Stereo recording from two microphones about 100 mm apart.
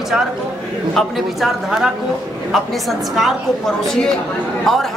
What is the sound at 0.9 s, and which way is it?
Speech, centre (ahead or behind).